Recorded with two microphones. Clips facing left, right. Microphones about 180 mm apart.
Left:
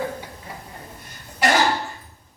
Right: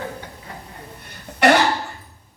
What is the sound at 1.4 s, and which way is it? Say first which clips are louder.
Cough: right 5 dB; 65° right (ahead or behind).